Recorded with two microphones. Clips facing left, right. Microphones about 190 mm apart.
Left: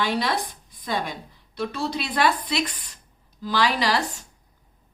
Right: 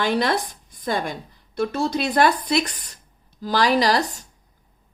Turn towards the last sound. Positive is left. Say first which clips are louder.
# right 5 dB
turn(degrees=-40)  # may be behind; listen again after turning